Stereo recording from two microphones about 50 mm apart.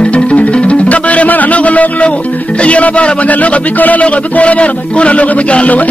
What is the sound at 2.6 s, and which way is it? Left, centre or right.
Speech, left.